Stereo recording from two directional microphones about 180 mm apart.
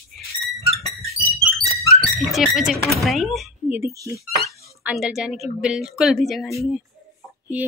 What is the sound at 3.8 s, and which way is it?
Speech, 15° right (ahead or behind).